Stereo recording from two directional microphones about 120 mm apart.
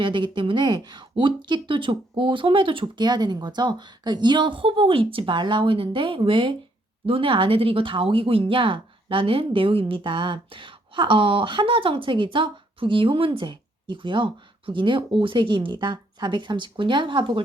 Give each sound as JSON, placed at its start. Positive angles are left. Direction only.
{"t": 0.0, "sound": "speech", "side_deg": -40}